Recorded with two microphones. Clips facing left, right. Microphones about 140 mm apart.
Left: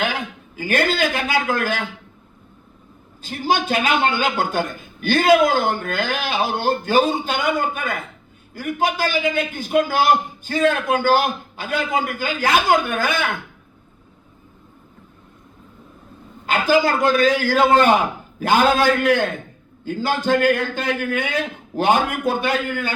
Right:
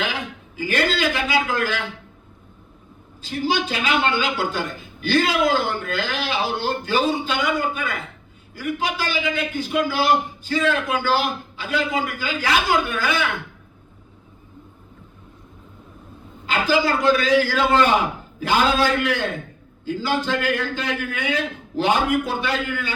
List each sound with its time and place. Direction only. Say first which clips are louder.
0.0 s a man's voice: left 3 dB; 50° left (ahead or behind)
3.2 s a man's voice: left 2 dB; 50° left (ahead or behind)
16.5 s a man's voice: left 3 dB; 50° left (ahead or behind)